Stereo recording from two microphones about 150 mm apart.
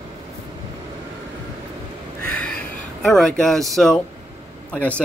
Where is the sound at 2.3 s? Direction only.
10° left (ahead or behind).